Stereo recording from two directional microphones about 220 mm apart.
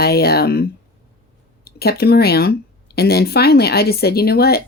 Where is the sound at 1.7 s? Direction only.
45° left (ahead or behind).